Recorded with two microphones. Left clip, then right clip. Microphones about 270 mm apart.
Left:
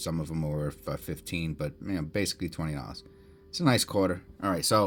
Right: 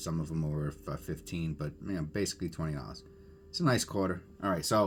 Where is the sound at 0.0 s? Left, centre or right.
Left.